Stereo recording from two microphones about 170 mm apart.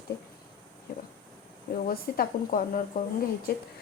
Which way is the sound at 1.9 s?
60° left (ahead or behind).